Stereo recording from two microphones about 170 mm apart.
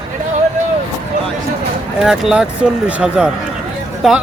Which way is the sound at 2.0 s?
5° right (ahead or behind).